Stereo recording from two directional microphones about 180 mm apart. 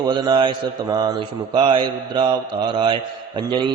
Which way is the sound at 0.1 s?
25° right (ahead or behind).